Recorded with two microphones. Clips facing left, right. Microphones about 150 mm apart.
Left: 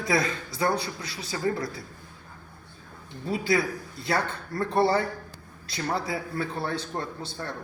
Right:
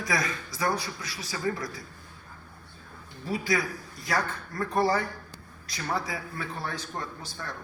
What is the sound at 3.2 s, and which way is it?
A man's voice, 25° left (ahead or behind).